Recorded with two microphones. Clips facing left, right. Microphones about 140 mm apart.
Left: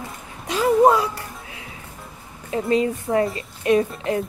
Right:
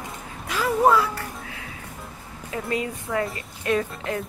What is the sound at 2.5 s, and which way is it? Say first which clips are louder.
A woman's voice: left 7 dB; 25° left (ahead or behind).